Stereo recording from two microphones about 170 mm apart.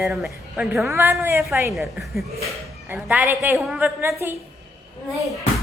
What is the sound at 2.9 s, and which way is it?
A woman's voice, 10° right (ahead or behind).